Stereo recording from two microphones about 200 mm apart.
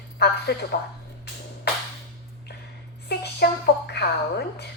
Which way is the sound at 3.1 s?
55° left (ahead or behind).